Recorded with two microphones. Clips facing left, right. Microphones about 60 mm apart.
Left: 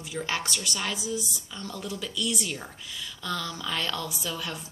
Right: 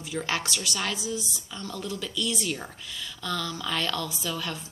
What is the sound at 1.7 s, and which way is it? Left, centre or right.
Speech, left.